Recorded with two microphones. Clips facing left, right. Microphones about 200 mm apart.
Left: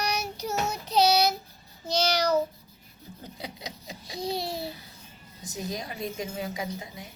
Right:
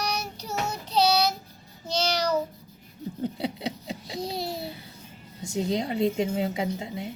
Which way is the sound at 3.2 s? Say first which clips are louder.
Right 11 dB; 30° right (ahead or behind).